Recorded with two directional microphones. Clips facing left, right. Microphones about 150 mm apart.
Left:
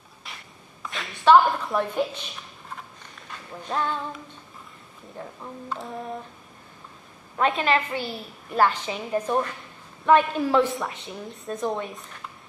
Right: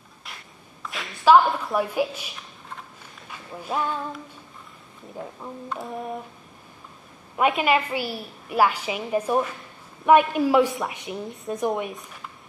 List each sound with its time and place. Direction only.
0.8 s a sound: centre (ahead or behind)
5.2 s speech: 5° right (ahead or behind)
7.3 s a woman's voice: 10° right (ahead or behind)
11.2 s speech: centre (ahead or behind)
11.6 s speech: 20° right (ahead or behind)
11.9 s speech: centre (ahead or behind)